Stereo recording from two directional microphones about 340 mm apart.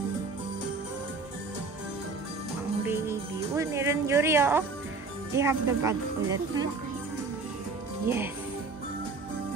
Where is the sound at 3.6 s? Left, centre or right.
Centre.